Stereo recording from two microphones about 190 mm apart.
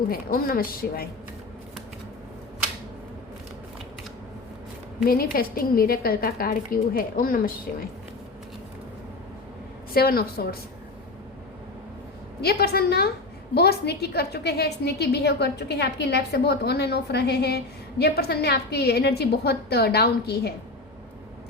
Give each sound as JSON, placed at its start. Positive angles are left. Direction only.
{"t": 0.1, "sound": "a woman's voice", "side_deg": 50}
{"t": 5.0, "sound": "a woman's voice", "side_deg": 50}
{"t": 9.9, "sound": "a woman's voice", "side_deg": 55}
{"t": 12.4, "sound": "a woman's voice", "side_deg": 55}